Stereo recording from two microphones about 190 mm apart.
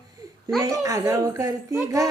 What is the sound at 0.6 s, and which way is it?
Speech, 15° right (ahead or behind).